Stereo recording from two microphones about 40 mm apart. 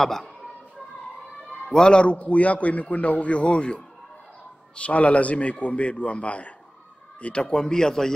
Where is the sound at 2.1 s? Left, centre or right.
Left.